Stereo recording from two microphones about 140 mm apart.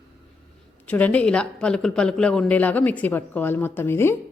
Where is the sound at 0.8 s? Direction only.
10° left (ahead or behind).